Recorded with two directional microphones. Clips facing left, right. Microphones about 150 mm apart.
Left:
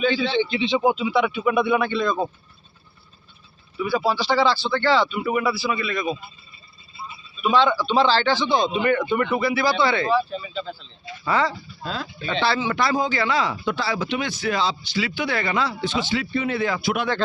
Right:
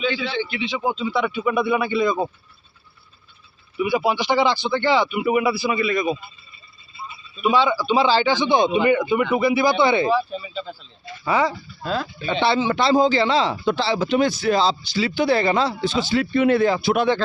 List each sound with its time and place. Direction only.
0.0 s speech: 35° left (ahead or behind)
0.3 s speech: 25° left (ahead or behind)
0.9 s speech: 5° left (ahead or behind)
3.8 s speech: 15° right (ahead or behind)
7.4 s speech: 10° right (ahead or behind); by 16.2 s 35° right (ahead or behind)
16.3 s speech: 60° right (ahead or behind)
16.6 s speech: 30° right (ahead or behind)